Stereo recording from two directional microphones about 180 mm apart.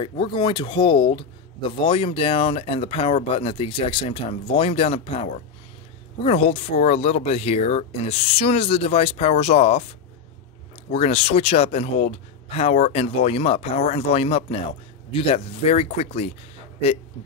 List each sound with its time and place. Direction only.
0.0 s speech: 25° left (ahead or behind)
10.9 s speech: 35° left (ahead or behind)